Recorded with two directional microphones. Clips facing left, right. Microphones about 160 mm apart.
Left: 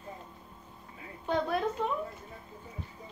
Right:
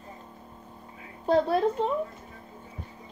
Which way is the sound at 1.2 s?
35° right (ahead or behind).